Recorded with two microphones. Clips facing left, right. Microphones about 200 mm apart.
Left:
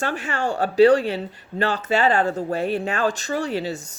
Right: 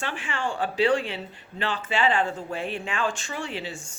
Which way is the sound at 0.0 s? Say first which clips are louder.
Left 6 dB; 40° left (ahead or behind).